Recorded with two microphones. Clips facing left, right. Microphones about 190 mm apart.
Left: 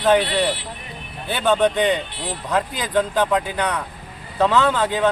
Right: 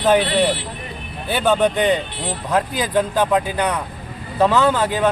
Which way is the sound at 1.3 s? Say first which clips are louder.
Right 1 dB; 10° right (ahead or behind).